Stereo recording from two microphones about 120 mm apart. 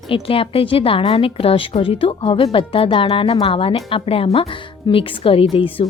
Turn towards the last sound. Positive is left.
turn(degrees=50)  # may be behind; listen again after turning